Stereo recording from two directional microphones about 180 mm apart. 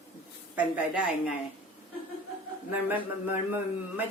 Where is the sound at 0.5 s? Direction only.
5° right (ahead or behind).